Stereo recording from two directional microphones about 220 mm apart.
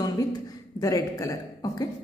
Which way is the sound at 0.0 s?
15° left (ahead or behind).